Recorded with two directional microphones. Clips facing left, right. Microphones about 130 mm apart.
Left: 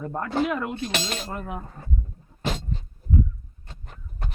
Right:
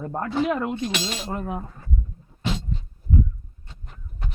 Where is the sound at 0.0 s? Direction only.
20° right (ahead or behind).